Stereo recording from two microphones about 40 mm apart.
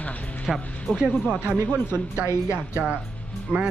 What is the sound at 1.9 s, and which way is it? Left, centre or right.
A woman's voice, right.